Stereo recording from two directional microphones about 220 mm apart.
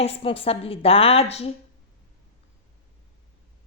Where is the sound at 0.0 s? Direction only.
25° left (ahead or behind).